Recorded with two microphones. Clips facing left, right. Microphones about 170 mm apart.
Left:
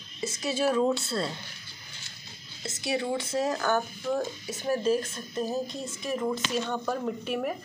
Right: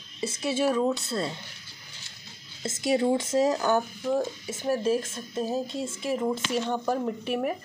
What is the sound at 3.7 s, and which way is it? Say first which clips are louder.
Speech: right 2 dB; 15° right (ahead or behind).